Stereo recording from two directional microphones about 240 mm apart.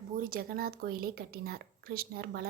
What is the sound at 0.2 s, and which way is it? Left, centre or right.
A woman's voice, right.